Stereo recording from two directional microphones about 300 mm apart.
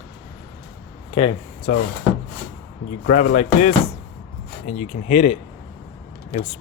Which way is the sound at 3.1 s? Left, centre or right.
Left.